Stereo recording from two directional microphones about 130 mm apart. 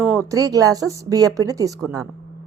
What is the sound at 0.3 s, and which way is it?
A woman's voice, 25° right (ahead or behind).